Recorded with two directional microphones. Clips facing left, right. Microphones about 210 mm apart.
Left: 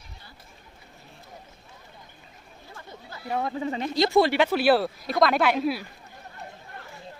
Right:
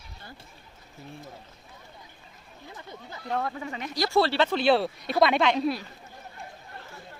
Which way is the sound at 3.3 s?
10° left (ahead or behind).